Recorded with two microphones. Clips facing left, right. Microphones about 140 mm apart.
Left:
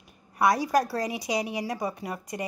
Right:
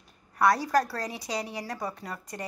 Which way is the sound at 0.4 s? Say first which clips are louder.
Left 1 dB; 15° left (ahead or behind).